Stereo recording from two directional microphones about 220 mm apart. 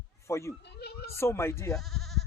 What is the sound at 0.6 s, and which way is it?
Speech, 50° left (ahead or behind).